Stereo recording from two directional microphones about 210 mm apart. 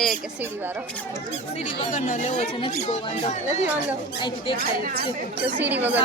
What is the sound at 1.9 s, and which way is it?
Speech, 35° left (ahead or behind).